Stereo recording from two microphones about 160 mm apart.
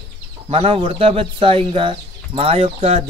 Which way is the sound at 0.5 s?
35° right (ahead or behind).